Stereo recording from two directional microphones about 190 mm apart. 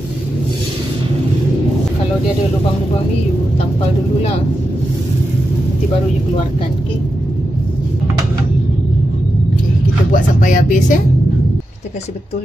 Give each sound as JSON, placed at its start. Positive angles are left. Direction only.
{"t": 10.1, "sound": "speech", "side_deg": 40}